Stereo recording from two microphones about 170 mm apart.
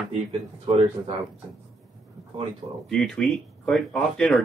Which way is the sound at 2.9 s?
5° left (ahead or behind).